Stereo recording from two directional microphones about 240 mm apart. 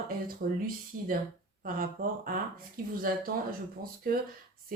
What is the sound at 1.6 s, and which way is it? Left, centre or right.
Speech, right.